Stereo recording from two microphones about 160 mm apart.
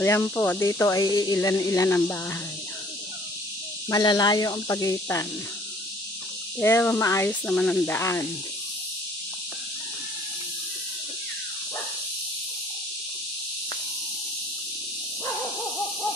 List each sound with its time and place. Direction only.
0.0 s speech: 15° left (ahead or behind)
3.9 s speech: 25° left (ahead or behind)
6.6 s speech: 15° left (ahead or behind)